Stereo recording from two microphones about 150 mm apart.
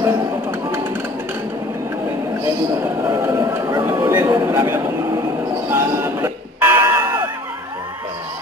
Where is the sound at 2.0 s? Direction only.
20° right (ahead or behind).